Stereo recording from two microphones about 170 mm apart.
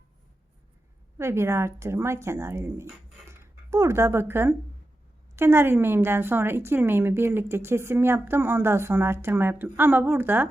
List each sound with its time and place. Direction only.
1.2 s a woman's voice: 15° right (ahead or behind)
3.2 s a sound: 15° right (ahead or behind)
5.4 s a woman's voice: 15° right (ahead or behind)